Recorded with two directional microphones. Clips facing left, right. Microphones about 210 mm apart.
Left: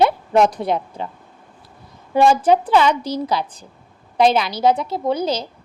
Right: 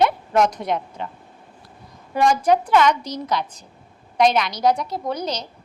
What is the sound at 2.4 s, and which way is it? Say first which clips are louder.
A woman's voice: left 2 dB; 30° left (ahead or behind).